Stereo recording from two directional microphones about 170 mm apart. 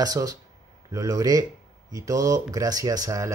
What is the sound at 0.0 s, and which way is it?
Speech, 20° right (ahead or behind).